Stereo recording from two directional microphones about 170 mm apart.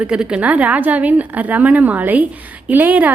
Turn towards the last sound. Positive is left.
turn(degrees=-10)  # may be behind; listen again after turning